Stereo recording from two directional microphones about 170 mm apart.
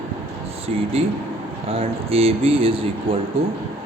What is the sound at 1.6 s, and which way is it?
Speech, 35° right (ahead or behind).